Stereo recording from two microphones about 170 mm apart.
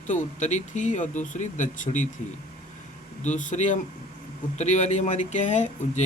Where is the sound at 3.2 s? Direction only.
45° left (ahead or behind).